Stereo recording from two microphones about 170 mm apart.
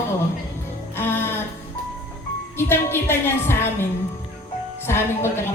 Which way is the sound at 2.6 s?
15° left (ahead or behind).